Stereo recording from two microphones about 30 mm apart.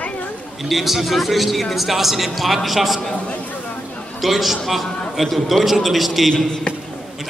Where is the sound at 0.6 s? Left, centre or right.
Centre.